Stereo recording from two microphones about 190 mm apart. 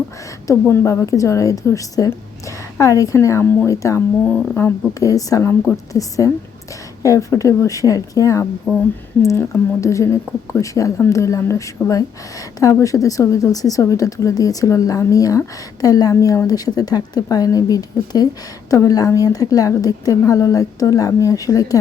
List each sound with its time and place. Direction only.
0.4 s a woman's voice: 15° left (ahead or behind)
8.7 s speech: centre (ahead or behind)
9.2 s a woman's voice: 15° left (ahead or behind)